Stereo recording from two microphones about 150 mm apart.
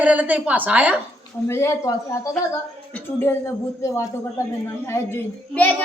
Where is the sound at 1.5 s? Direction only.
20° left (ahead or behind).